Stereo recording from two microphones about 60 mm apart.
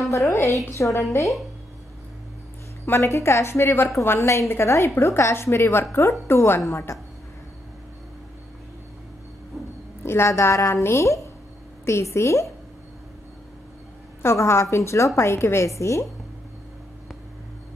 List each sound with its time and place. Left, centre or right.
0.1 s a woman's voice: left
0.8 s a woman's voice: left
3.0 s a woman's voice: left
4.2 s a woman's voice: left
10.0 s a man's voice: left
14.2 s a woman's voice: left